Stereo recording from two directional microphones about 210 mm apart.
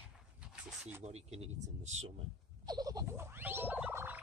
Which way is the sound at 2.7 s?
20° right (ahead or behind).